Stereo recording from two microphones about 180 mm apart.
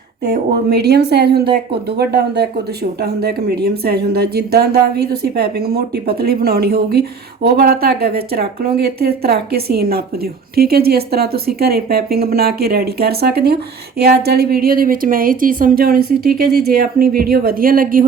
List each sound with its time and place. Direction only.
0.5 s a woman's voice: 65° right (ahead or behind)